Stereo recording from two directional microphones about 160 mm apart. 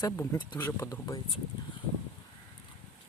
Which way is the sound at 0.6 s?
15° left (ahead or behind).